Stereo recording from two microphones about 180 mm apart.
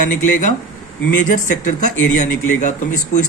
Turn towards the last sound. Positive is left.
turn(degrees=45)  # may be behind; listen again after turning